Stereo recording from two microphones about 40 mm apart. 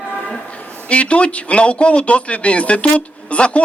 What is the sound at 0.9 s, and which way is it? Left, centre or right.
Speech, left.